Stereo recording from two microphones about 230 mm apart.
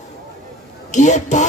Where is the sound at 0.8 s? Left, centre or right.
Left.